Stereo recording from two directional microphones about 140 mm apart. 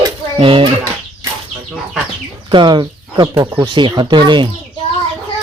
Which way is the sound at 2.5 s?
35° right (ahead or behind).